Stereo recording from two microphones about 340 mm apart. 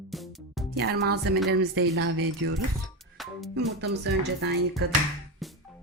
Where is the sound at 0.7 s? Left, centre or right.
Right.